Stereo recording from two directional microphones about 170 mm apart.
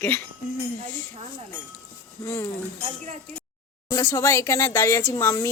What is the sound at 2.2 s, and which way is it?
Speech, 15° left (ahead or behind).